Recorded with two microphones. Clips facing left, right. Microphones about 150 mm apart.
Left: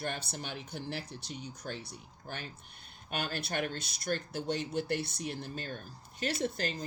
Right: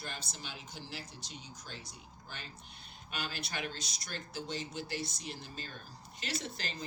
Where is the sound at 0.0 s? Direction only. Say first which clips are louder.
Left 7 dB; 60° left (ahead or behind).